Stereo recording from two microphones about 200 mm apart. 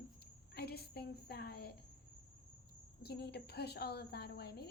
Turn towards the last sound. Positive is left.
turn(degrees=55)  # may be behind; listen again after turning